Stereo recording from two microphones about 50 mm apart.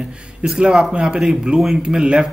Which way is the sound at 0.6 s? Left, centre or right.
Centre.